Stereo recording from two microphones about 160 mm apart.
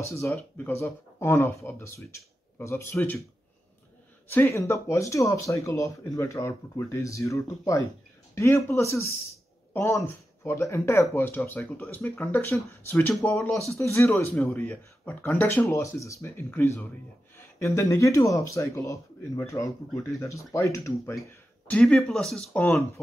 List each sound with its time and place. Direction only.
0.2 s speech: 15° left (ahead or behind)
4.3 s speech: 15° left (ahead or behind)
13.1 s speech: centre (ahead or behind)
13.7 s speech: 15° left (ahead or behind)
21.1 s speech: 5° left (ahead or behind)